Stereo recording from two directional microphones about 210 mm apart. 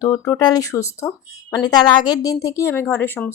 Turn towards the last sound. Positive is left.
turn(degrees=10)  # may be behind; listen again after turning